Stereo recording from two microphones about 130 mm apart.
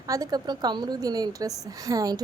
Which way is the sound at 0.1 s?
30° right (ahead or behind).